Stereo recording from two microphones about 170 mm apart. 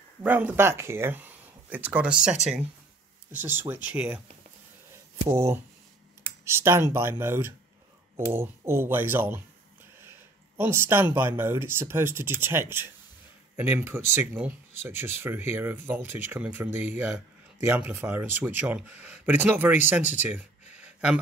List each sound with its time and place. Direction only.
0.2 s speech: 10° right (ahead or behind)
5.3 s speech: 15° right (ahead or behind)
10.6 s speech: 15° right (ahead or behind)
20.7 s a sound: 5° right (ahead or behind)